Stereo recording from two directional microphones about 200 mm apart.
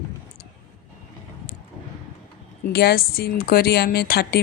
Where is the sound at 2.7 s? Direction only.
50° left (ahead or behind).